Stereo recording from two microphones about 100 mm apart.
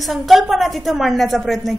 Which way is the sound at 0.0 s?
Centre (ahead or behind).